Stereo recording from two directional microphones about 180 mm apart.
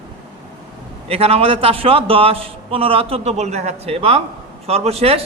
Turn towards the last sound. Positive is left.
turn(degrees=-35)  # may be behind; listen again after turning